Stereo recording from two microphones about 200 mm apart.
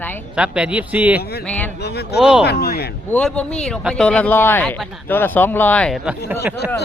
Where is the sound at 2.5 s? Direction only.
50° left (ahead or behind).